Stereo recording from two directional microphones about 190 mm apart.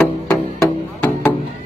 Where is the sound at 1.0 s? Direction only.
10° left (ahead or behind).